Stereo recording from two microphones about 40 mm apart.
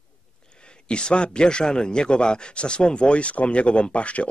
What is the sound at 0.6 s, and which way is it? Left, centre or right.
A man's voice, left.